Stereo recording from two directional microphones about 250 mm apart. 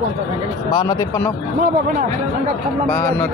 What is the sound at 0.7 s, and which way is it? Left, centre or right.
Speech, centre.